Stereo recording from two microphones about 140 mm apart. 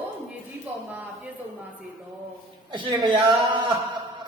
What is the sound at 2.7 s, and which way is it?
Speech, 35° right (ahead or behind).